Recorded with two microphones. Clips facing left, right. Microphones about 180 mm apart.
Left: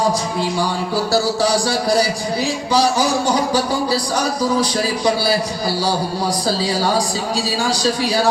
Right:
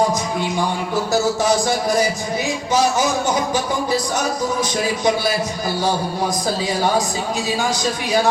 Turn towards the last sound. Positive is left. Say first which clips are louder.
# left 1 dB
turn(degrees=35)  # may be behind; listen again after turning